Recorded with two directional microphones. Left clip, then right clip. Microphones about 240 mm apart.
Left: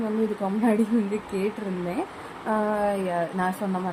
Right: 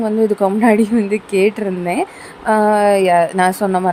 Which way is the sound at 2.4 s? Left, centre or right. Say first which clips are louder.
Right 12 dB; right.